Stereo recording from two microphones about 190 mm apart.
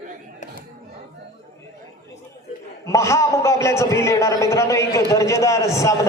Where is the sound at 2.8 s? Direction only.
15° left (ahead or behind).